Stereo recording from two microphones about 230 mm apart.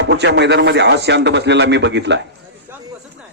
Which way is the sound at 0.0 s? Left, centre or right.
Right.